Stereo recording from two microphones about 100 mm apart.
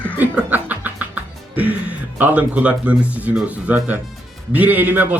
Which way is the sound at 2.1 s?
15° right (ahead or behind).